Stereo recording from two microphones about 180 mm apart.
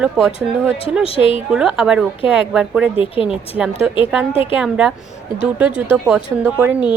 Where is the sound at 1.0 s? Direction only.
30° left (ahead or behind).